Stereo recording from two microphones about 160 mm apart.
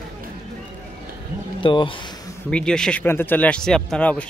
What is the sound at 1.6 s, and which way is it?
Speech, 30° left (ahead or behind).